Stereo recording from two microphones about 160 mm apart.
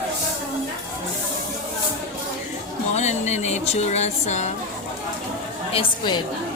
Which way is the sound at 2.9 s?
45° left (ahead or behind).